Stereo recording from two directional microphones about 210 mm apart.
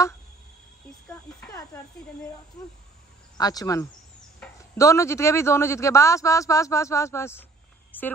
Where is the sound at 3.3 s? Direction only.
15° left (ahead or behind).